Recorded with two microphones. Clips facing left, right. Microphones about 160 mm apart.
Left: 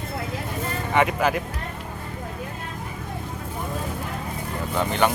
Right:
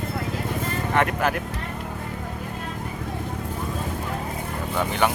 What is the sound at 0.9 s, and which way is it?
Speech, 5° left (ahead or behind).